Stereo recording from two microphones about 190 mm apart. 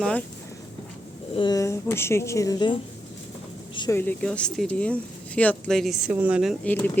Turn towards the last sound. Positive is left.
turn(degrees=10)  # may be behind; listen again after turning